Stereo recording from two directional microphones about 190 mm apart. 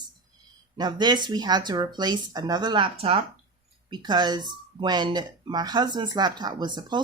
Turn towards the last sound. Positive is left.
turn(degrees=-25)  # may be behind; listen again after turning